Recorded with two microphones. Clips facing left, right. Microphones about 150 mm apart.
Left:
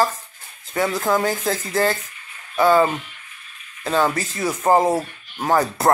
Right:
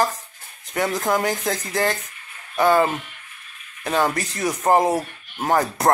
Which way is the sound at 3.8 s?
15° right (ahead or behind).